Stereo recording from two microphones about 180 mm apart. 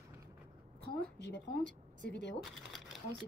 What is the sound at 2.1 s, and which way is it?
Speech, 75° left (ahead or behind).